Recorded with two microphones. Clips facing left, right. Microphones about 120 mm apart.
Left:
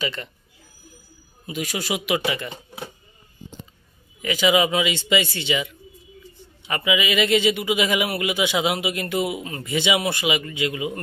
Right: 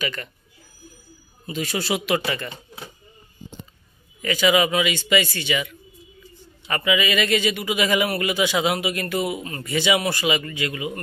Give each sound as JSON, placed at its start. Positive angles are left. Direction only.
{"t": 0.0, "sound": "a man's voice", "side_deg": 20}
{"t": 1.4, "sound": "speech", "side_deg": 10}
{"t": 4.2, "sound": "a man's voice", "side_deg": 20}